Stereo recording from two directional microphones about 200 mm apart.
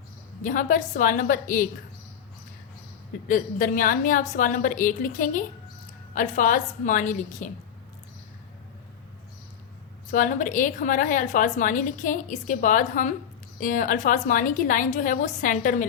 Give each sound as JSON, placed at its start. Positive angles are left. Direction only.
{"t": 0.4, "sound": "a woman's voice", "side_deg": 40}
{"t": 3.2, "sound": "a woman's voice", "side_deg": 40}
{"t": 10.1, "sound": "a woman's voice", "side_deg": 40}